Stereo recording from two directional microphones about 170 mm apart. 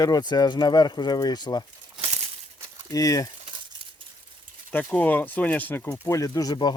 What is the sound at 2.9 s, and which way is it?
Speech, 20° left (ahead or behind).